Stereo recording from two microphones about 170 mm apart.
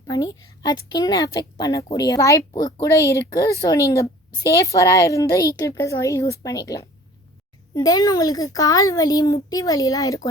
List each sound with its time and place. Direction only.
0.6 s speech: 25° left (ahead or behind)